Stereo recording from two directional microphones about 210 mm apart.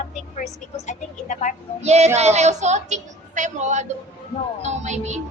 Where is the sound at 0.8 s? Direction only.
35° left (ahead or behind).